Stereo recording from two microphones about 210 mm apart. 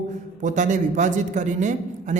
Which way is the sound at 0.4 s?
35° right (ahead or behind).